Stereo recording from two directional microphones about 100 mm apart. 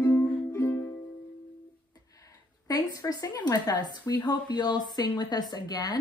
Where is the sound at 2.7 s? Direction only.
40° left (ahead or behind).